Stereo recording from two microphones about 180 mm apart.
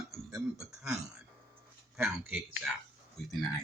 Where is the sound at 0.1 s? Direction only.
15° right (ahead or behind).